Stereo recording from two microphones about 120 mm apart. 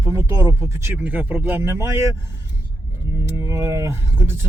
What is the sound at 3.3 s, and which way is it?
Speech, 25° right (ahead or behind).